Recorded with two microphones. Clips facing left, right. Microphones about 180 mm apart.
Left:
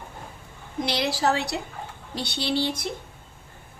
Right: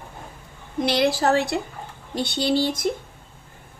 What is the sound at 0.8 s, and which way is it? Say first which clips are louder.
A woman's voice: right 5 dB; 55° right (ahead or behind).